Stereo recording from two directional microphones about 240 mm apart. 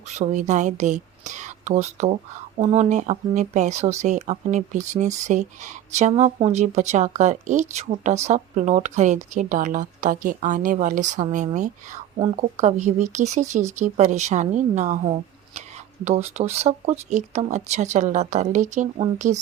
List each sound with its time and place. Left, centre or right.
0.2 s a woman's voice: right